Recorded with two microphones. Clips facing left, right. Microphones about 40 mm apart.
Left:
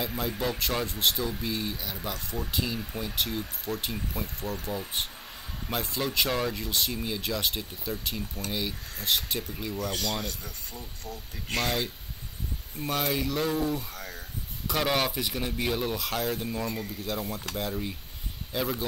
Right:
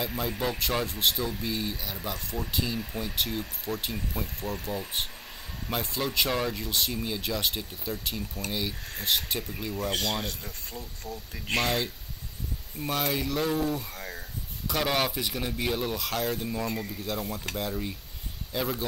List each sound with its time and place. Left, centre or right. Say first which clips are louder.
0.0 s speech: even; centre
9.8 s speech: right 2 dB; right
12.8 s speech: even; centre
13.9 s a sound: right 2 dB; right
14.7 s speech: even; centre